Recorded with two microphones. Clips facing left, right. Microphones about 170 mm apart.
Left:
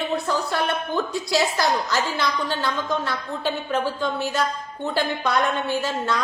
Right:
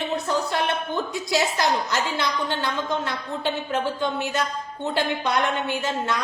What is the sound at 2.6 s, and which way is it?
A woman's voice, 20° right (ahead or behind).